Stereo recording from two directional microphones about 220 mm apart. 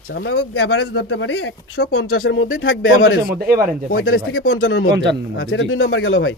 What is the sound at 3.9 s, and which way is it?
Speech, 60° left (ahead or behind).